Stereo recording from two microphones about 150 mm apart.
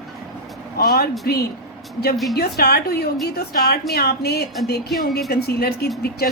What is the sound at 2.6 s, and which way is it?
A woman's voice, 90° left.